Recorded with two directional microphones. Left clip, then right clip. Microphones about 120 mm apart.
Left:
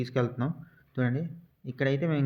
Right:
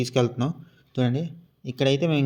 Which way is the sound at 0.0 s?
20° right (ahead or behind).